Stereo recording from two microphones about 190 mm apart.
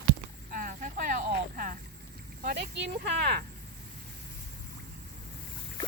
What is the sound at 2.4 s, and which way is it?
Speech, 60° right (ahead or behind).